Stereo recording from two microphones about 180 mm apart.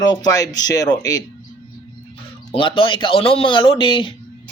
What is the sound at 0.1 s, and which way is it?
Speech, 20° left (ahead or behind).